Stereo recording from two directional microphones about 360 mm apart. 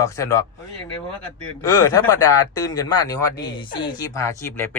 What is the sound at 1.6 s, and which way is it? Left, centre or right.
Speech, centre.